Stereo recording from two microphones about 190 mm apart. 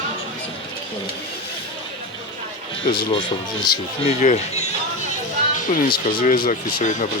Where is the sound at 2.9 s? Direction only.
25° left (ahead or behind).